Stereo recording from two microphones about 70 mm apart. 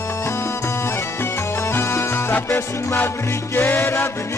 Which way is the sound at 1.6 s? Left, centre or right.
Left.